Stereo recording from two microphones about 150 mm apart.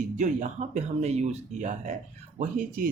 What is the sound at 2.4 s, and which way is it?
Speech, 65° right (ahead or behind).